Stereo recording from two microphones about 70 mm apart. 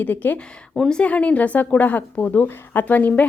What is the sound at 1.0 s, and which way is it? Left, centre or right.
A woman's voice, centre.